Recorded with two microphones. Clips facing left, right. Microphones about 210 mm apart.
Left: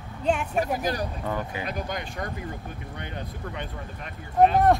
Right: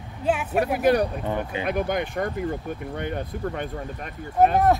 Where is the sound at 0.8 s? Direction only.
65° right (ahead or behind).